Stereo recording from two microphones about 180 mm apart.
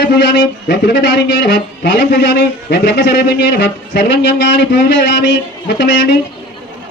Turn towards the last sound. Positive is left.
turn(degrees=75)  # may be behind; listen again after turning